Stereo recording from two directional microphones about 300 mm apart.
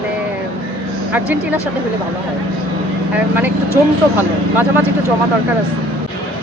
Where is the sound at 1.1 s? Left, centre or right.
Centre.